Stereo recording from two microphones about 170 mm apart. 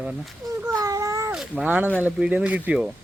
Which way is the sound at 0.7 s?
20° right (ahead or behind).